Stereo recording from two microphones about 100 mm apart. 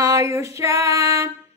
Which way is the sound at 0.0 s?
30° right (ahead or behind).